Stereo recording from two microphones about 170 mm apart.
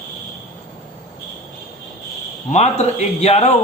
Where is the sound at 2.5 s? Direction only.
40° left (ahead or behind).